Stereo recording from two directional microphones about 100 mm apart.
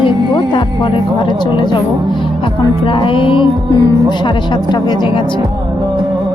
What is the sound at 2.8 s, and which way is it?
Music, 60° left (ahead or behind).